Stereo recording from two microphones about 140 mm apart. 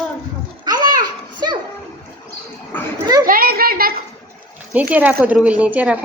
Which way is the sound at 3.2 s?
90° right.